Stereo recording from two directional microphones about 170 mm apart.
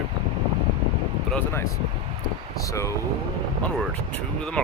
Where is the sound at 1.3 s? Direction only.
10° left (ahead or behind).